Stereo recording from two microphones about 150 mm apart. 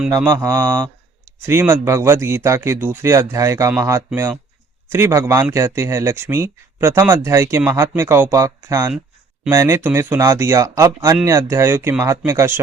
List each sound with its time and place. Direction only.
0.2 s speech: 15° right (ahead or behind)